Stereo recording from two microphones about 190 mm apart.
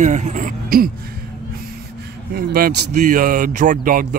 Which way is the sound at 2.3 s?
50° right (ahead or behind).